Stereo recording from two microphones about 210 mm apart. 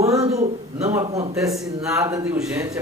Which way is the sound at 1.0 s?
25° right (ahead or behind).